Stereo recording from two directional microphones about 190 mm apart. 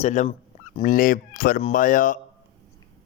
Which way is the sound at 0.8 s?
50° left (ahead or behind).